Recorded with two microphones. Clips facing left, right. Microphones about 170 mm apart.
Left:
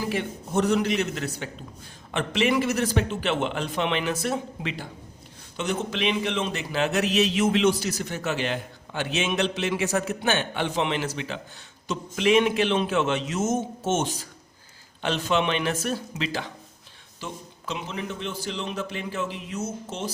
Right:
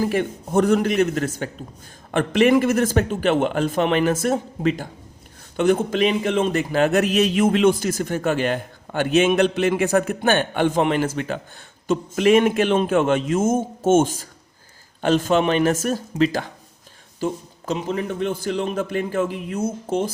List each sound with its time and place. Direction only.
0.0 s speech: 50° right (ahead or behind)